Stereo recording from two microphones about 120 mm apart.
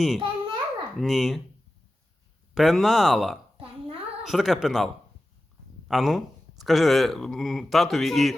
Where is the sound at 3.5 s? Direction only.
50° right (ahead or behind).